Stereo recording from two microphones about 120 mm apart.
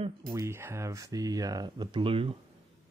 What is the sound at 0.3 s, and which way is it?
Speech, 25° right (ahead or behind).